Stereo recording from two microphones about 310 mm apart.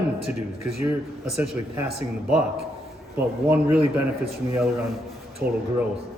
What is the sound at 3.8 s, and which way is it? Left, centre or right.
Speech, centre.